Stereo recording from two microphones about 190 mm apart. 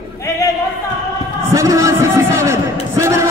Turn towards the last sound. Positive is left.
turn(degrees=-15)  # may be behind; listen again after turning